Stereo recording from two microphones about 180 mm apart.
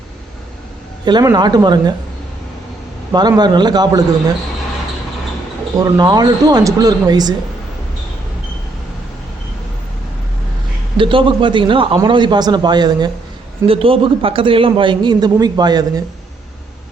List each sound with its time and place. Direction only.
1.0 s a man's voice: 20° right (ahead or behind)
3.1 s a man's voice: 25° right (ahead or behind)
5.7 s a man's voice: 20° right (ahead or behind)
10.9 s a man's voice: 30° right (ahead or behind)